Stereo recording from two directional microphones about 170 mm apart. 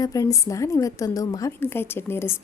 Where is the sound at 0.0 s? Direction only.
20° left (ahead or behind).